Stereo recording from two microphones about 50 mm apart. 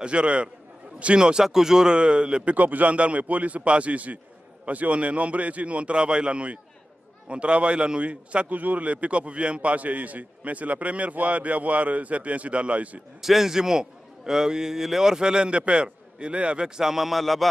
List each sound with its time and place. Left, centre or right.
0.0 s a man's voice: right
2.5 s a man's voice: right
13.2 s a man's voice: centre